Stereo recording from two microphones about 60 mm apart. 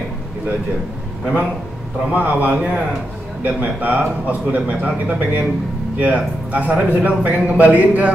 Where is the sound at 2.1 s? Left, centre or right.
Right.